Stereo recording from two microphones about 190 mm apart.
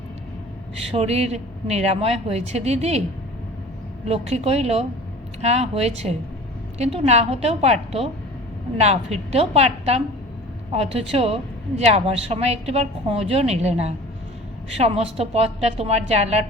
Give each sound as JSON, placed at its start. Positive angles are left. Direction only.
{"t": 0.9, "sound": "a woman's voice", "side_deg": -35}
{"t": 4.0, "sound": "a woman's voice", "side_deg": -35}